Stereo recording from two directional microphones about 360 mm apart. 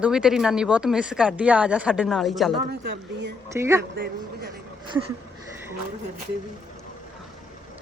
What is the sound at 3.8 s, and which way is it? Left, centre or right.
Speech, right.